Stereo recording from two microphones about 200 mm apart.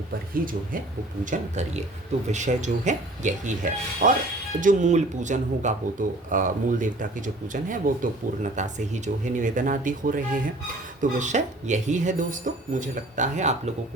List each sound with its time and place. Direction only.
0.3 s speech: 45° right (ahead or behind)